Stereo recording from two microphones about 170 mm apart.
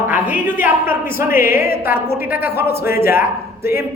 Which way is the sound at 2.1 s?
10° right (ahead or behind).